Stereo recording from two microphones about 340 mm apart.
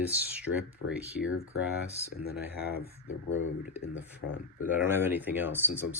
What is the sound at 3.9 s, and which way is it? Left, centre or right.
Speech, centre.